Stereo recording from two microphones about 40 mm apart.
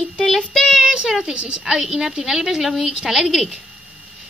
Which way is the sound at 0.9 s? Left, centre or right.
Centre.